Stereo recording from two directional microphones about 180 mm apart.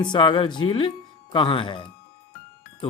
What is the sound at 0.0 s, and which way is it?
Speech, 25° left (ahead or behind).